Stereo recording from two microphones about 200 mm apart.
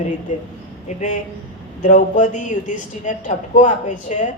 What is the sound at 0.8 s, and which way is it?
Speech, 40° left (ahead or behind).